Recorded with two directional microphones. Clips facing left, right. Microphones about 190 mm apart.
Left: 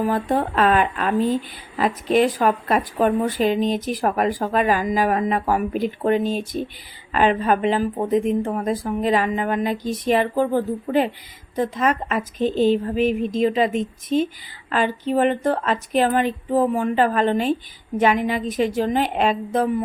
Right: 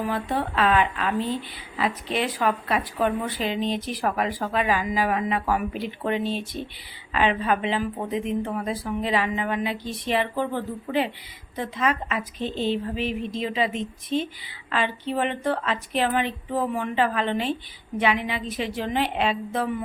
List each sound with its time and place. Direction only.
0.0 s speech: 45° left (ahead or behind)